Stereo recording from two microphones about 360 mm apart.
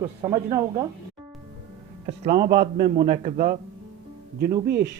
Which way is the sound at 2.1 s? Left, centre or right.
Centre.